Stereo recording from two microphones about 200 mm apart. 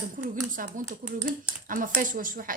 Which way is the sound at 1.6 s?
45° right (ahead or behind).